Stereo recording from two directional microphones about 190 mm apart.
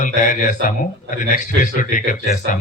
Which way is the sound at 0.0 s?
40° left (ahead or behind).